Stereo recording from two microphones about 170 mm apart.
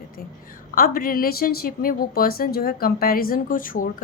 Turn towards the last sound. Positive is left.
turn(degrees=55)  # may be behind; listen again after turning